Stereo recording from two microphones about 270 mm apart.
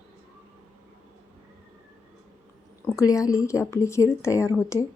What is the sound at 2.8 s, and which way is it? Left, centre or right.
Speech, centre.